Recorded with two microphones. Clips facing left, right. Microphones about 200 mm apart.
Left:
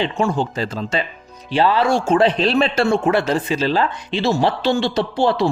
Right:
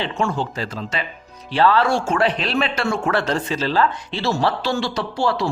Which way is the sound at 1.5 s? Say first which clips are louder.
Left 1 dB; 15° left (ahead or behind).